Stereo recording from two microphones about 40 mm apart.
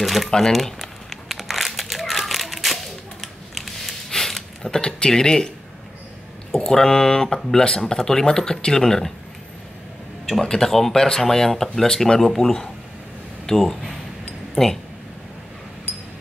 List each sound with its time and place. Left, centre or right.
0.0 s speech: centre
0.4 s crumpling: centre
4.7 s speech: centre
6.5 s speech: centre
10.2 s speech: centre